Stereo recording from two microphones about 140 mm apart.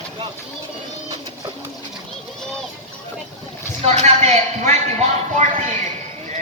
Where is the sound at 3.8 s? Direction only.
50° right (ahead or behind).